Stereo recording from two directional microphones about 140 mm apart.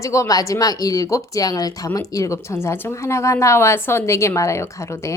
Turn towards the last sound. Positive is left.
turn(degrees=20)  # may be behind; listen again after turning